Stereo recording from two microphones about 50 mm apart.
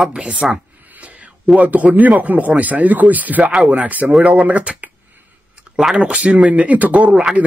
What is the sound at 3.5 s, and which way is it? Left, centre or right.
Speech, right.